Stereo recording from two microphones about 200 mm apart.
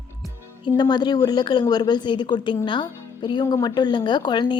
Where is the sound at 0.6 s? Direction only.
20° left (ahead or behind).